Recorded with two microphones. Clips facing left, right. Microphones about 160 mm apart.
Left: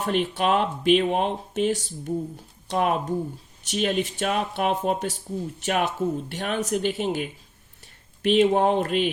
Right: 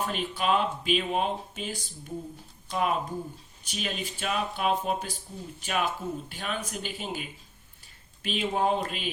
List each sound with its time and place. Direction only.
0.0 s speech: 70° left (ahead or behind)
2.6 s speech: 60° left (ahead or behind)